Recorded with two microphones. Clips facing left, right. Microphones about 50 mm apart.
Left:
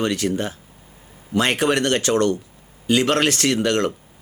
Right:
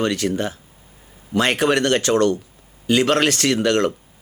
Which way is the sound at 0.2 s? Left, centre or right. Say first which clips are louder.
Even; centre.